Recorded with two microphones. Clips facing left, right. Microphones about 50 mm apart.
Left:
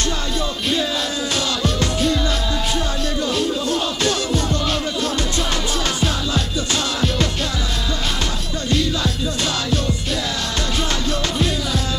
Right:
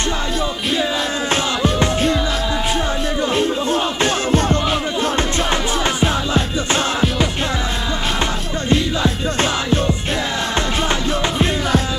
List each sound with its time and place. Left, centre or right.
1.3 s music: right
3.3 s music: right
8.6 s music: right